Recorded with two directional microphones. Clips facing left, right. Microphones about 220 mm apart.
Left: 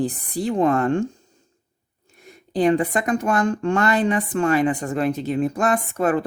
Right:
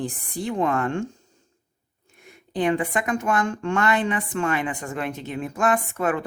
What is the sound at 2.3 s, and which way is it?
A woman's voice, 35° left (ahead or behind).